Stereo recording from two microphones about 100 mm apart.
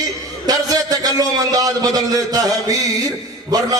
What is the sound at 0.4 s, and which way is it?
A man's voice, 40° right (ahead or behind).